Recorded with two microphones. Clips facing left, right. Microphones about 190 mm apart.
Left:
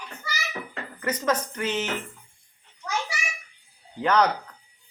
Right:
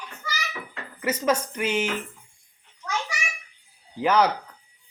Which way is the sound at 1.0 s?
10° right (ahead or behind).